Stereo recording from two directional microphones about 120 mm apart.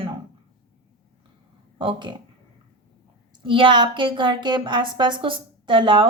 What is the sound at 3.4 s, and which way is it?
A woman's voice, 45° right (ahead or behind).